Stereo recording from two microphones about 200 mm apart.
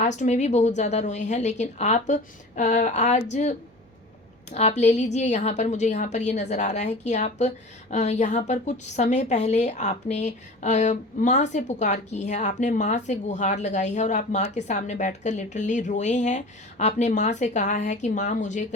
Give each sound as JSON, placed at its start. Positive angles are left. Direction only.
{"t": 0.0, "sound": "a woman's voice", "side_deg": 35}
{"t": 4.5, "sound": "a woman's voice", "side_deg": 35}